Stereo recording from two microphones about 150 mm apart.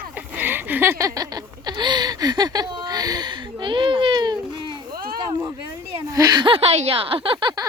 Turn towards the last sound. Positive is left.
turn(degrees=-35)  # may be behind; listen again after turning